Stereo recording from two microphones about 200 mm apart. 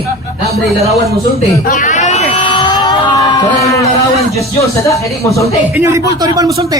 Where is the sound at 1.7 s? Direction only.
40° left (ahead or behind); by 3.8 s 15° left (ahead or behind).